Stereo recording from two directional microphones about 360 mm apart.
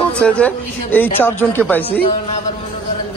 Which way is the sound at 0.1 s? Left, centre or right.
Centre.